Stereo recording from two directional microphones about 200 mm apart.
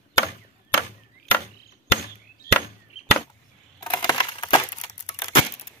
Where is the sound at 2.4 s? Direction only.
50° left (ahead or behind).